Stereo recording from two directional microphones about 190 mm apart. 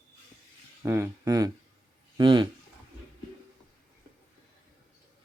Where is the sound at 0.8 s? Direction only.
10° right (ahead or behind).